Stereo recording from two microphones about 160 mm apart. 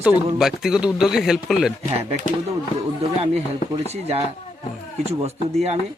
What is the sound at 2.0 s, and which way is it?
Speech, 40° right (ahead or behind).